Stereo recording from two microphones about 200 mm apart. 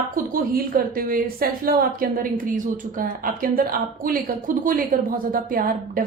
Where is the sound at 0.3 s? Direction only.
45° right (ahead or behind).